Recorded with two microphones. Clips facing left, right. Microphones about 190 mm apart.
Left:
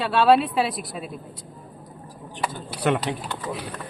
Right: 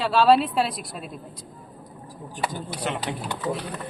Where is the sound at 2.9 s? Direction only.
60° left (ahead or behind).